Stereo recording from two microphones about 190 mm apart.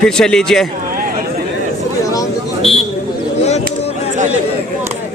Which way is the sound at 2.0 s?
15° left (ahead or behind).